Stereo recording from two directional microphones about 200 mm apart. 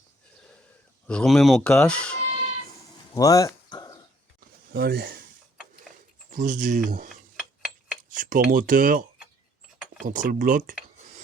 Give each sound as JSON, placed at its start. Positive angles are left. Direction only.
{"t": 1.0, "sound": "speech", "side_deg": 5}
{"t": 3.2, "sound": "dog", "side_deg": 15}
{"t": 4.7, "sound": "speech", "side_deg": -55}
{"t": 6.3, "sound": "speech", "side_deg": -40}
{"t": 7.1, "sound": "a sound", "side_deg": 0}
{"t": 8.2, "sound": "speech", "side_deg": -40}